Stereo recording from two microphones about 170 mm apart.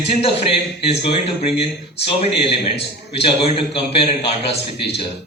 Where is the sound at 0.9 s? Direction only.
35° left (ahead or behind).